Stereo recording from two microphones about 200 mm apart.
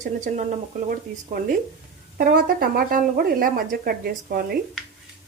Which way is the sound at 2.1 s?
45° right (ahead or behind).